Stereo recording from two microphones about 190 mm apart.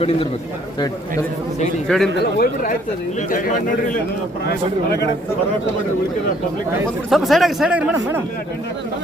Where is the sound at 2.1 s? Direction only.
55° left (ahead or behind).